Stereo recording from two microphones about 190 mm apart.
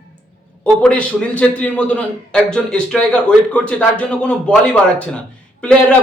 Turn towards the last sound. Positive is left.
turn(degrees=5)  # may be behind; listen again after turning